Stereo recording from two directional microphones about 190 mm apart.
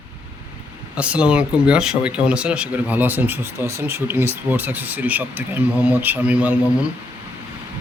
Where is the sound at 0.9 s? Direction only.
5° right (ahead or behind).